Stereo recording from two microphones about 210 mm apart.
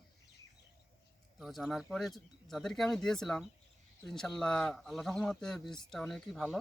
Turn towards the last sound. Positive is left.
turn(degrees=0)  # may be behind; listen again after turning